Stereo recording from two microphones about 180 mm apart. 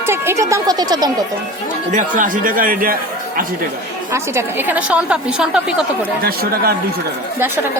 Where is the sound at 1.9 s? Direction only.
45° right (ahead or behind).